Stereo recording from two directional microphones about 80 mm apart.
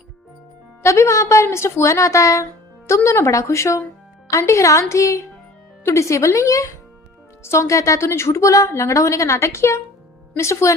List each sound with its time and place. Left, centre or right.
0.8 s a woman's voice: left